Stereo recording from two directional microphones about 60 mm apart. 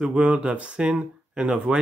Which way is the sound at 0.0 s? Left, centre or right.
Centre.